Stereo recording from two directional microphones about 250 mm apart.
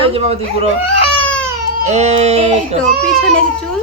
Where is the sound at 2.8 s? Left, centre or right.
Centre.